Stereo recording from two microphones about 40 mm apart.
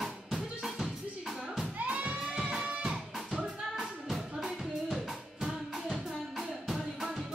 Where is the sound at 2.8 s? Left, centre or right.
Right.